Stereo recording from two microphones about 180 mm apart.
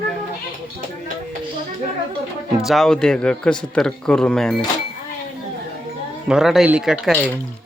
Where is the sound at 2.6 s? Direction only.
Centre (ahead or behind).